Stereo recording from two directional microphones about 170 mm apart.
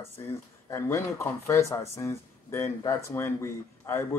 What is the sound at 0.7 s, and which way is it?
Speech, 15° left (ahead or behind).